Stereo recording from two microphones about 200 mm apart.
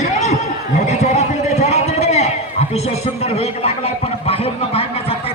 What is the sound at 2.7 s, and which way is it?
A man's voice, 30° left (ahead or behind).